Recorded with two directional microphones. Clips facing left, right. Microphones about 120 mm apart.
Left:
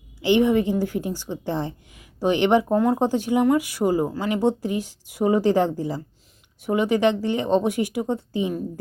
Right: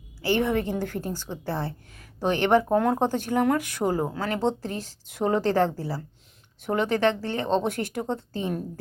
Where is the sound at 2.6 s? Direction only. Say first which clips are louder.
Left 2 dB; centre (ahead or behind).